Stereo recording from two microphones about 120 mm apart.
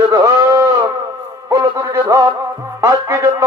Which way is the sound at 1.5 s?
30° right (ahead or behind).